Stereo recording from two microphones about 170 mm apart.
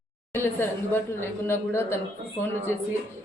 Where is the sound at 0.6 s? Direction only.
15° left (ahead or behind).